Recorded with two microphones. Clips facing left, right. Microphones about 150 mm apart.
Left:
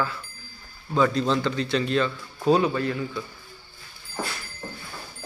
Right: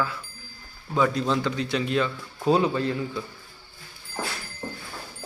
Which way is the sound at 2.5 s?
25° right (ahead or behind).